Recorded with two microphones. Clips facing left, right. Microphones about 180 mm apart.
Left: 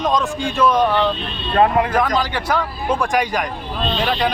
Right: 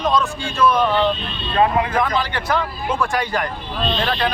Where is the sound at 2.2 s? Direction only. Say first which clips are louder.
Left 1 dB; 10° left (ahead or behind).